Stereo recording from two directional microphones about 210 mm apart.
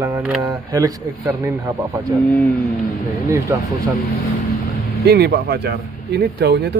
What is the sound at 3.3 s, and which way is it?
Speech, 15° right (ahead or behind).